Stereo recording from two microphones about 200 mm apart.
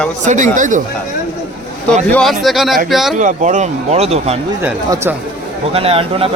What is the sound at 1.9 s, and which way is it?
Speech, 5° left (ahead or behind).